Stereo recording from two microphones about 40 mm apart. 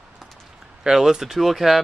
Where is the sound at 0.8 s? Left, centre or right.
Centre.